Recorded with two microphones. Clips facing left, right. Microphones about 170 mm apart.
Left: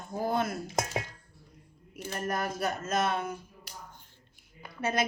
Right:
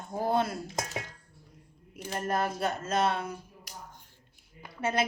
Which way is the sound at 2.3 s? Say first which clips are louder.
Right 2 dB; 25° right (ahead or behind).